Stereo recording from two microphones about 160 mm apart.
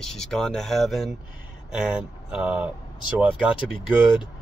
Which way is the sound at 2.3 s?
5° right (ahead or behind).